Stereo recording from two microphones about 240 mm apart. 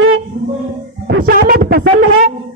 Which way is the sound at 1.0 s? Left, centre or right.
Right.